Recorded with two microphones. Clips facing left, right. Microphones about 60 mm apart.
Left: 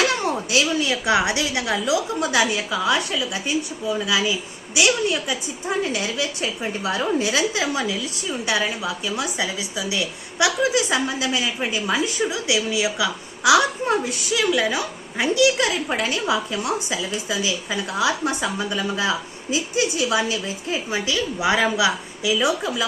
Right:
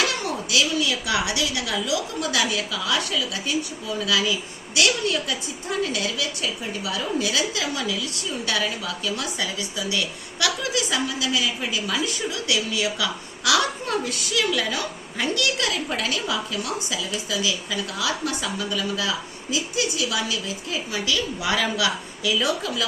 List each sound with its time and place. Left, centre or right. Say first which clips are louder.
0.3 s a woman's voice: left 3 dB; left